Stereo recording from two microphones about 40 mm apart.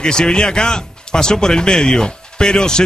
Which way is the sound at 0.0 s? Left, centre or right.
Centre.